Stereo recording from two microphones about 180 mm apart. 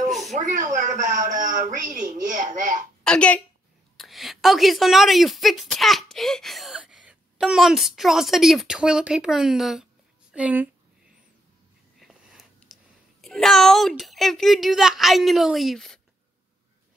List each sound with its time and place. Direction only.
0.3 s a woman's voice: 45° right (ahead or behind)
3.0 s a woman's voice: 5° left (ahead or behind)
12.0 s a sound: centre (ahead or behind)
13.2 s speech: centre (ahead or behind)